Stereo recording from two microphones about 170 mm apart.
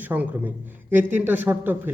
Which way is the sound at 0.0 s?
10° right (ahead or behind).